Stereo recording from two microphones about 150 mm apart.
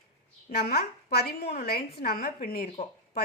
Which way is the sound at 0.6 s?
90° left.